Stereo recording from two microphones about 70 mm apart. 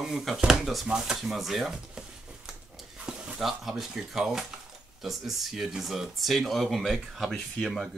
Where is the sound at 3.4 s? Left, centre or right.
Centre.